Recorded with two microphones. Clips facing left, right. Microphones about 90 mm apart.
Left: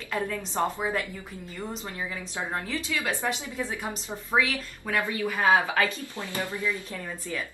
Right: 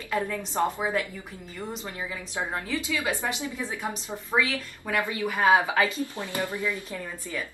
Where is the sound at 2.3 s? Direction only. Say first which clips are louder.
Right 2 dB; 20° right (ahead or behind).